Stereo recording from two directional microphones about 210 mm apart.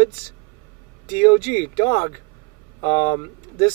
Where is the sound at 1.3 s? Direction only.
25° left (ahead or behind).